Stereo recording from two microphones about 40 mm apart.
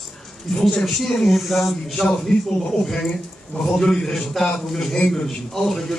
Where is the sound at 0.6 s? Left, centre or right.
Centre.